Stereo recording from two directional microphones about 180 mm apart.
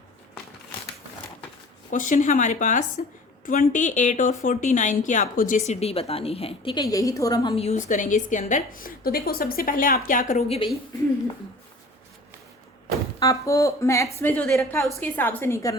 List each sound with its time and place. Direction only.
1.9 s a woman's voice: 45° left (ahead or behind); by 6.8 s 30° left (ahead or behind)
6.8 s a woman's voice: 20° left (ahead or behind)
7.5 s a woman's voice: 35° left (ahead or behind)
13.1 s a woman's voice: 20° left (ahead or behind)